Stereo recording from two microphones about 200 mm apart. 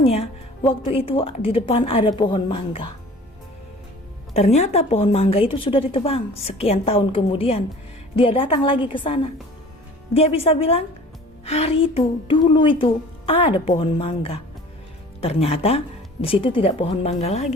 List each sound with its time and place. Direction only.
0.0 s a woman's voice: 30° left (ahead or behind)
4.4 s a woman's voice: 35° left (ahead or behind)